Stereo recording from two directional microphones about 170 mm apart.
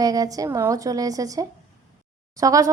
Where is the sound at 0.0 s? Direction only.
20° right (ahead or behind).